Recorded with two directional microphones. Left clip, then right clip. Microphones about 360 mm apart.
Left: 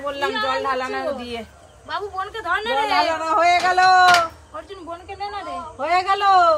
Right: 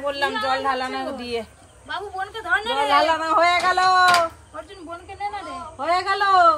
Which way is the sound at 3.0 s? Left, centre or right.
Centre.